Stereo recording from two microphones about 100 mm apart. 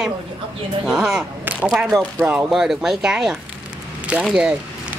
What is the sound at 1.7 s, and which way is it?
Speech, 5° right (ahead or behind).